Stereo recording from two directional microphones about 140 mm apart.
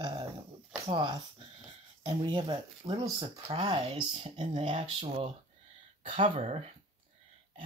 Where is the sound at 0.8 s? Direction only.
35° right (ahead or behind).